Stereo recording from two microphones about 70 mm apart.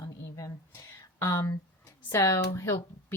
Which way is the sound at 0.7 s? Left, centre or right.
Left.